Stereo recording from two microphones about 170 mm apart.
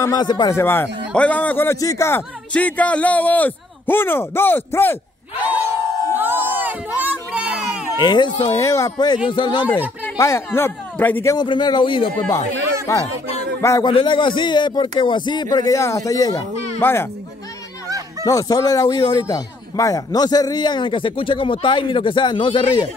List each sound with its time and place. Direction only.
0.0 s a man's voice: 25° left (ahead or behind)
5.4 s a sound: 10° right (ahead or behind)
8.0 s speech: 25° left (ahead or behind)
10.0 s speech: 15° left (ahead or behind)
11.3 s a man's voice: 25° left (ahead or behind)
13.9 s a man's voice: 30° left (ahead or behind)
18.2 s speech: 20° left (ahead or behind)